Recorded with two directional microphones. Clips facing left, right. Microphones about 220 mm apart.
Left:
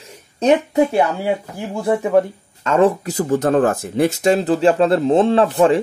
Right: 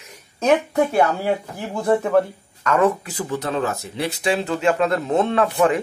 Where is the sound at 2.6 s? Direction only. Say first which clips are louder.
Left 4 dB; 30° left (ahead or behind).